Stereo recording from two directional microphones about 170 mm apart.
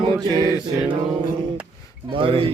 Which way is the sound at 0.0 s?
25° right (ahead or behind).